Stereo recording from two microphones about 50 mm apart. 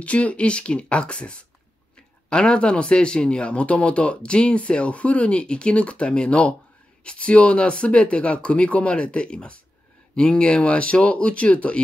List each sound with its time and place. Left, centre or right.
0.0 s speech: left